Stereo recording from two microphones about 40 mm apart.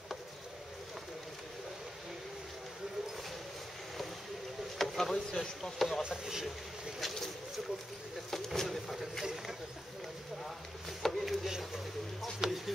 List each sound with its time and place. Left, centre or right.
4.7 s a sound: centre
5.1 s speech: centre
5.6 s speech: centre
6.2 s speech: centre
7.0 s boat: centre
8.5 s speech: centre
9.2 s speech: centre
10.4 s a sound: centre
11.4 s speech: centre